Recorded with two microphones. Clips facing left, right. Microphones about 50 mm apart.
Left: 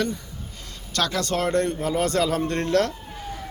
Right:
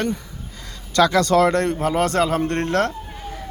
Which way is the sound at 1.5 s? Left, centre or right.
Right.